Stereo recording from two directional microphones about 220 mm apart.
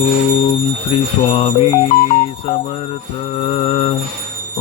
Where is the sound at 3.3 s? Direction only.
25° left (ahead or behind).